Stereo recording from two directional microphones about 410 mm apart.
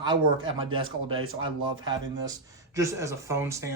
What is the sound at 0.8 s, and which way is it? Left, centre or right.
Speech, right.